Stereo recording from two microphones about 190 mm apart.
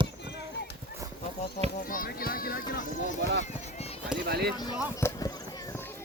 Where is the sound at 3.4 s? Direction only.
35° left (ahead or behind).